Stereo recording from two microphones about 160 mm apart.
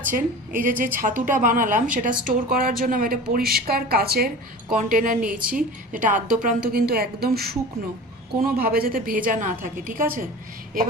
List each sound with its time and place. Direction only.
0.1 s a woman's voice: 60° right (ahead or behind); by 4.3 s 75° right (ahead or behind)
4.7 s a woman's voice: 60° right (ahead or behind); by 7.5 s 75° right (ahead or behind)
8.5 s a woman's voice: 70° right (ahead or behind)